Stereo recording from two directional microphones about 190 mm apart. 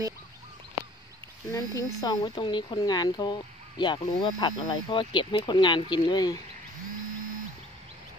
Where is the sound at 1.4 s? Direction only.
20° left (ahead or behind).